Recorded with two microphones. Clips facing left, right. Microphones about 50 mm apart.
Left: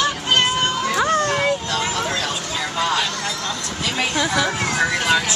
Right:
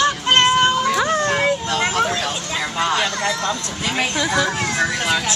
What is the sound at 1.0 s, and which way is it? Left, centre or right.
Music, centre.